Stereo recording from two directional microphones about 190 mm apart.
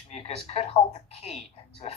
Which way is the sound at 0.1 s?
35° left (ahead or behind).